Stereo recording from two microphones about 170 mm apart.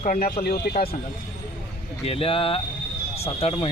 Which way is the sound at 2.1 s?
35° left (ahead or behind).